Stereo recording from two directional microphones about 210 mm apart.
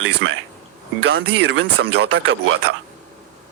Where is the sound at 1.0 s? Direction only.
55° right (ahead or behind).